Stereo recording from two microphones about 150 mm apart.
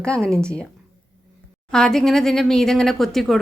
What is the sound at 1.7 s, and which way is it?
Speech, 5° left (ahead or behind).